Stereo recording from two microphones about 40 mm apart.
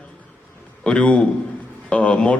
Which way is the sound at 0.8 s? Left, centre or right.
Left.